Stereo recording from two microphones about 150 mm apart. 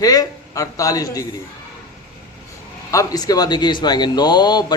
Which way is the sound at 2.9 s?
25° left (ahead or behind).